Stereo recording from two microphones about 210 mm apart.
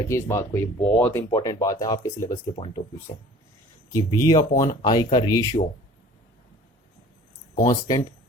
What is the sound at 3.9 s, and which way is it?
Speech, 15° left (ahead or behind).